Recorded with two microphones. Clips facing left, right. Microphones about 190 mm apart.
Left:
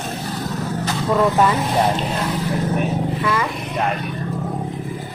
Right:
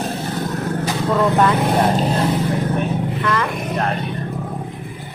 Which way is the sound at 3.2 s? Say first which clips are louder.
Right 1 dB; 5° left (ahead or behind).